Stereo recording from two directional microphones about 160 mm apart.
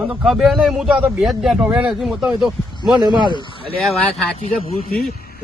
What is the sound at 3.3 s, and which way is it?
Speech, 30° left (ahead or behind).